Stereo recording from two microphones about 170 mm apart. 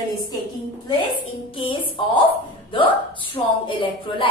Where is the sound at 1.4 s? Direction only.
30° left (ahead or behind).